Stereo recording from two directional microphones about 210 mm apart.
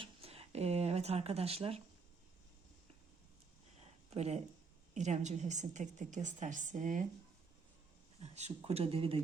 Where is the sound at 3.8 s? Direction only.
30° right (ahead or behind).